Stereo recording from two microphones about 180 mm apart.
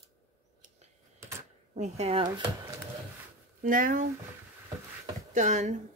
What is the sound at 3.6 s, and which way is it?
Speech, 50° right (ahead or behind).